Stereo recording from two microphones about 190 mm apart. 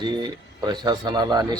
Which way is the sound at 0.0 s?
25° right (ahead or behind).